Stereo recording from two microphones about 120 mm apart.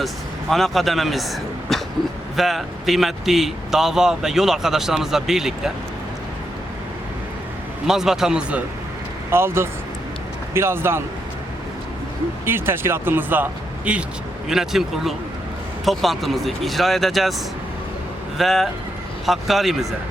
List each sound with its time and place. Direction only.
0.5 s speech: centre (ahead or behind)
1.7 s a sound: centre (ahead or behind)
2.3 s speech: centre (ahead or behind)
7.9 s speech: 5° right (ahead or behind)
9.3 s speech: 20° right (ahead or behind)
12.5 s speech: 20° right (ahead or behind); by 17.3 s centre (ahead or behind)
18.3 s speech: centre (ahead or behind)